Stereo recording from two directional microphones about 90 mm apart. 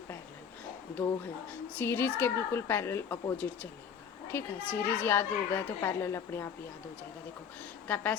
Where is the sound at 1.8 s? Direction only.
25° left (ahead or behind).